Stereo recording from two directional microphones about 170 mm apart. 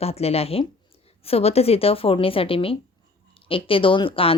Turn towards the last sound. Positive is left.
turn(degrees=35)  # may be behind; listen again after turning